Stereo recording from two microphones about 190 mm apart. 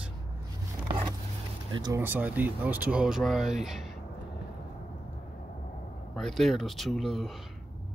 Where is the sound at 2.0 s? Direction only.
10° right (ahead or behind).